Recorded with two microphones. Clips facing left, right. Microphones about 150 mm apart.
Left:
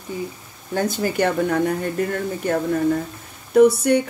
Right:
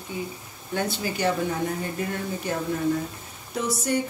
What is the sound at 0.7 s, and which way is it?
Speech, 45° left (ahead or behind).